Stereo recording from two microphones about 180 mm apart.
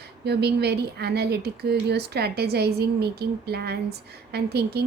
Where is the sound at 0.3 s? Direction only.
65° right (ahead or behind).